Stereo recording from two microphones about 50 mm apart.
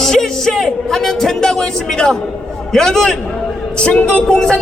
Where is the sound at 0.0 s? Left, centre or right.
Centre.